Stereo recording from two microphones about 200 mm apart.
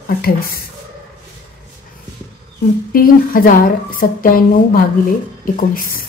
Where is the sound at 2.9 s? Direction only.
45° left (ahead or behind).